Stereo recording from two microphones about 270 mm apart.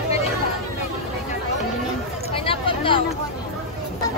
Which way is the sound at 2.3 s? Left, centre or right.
Centre.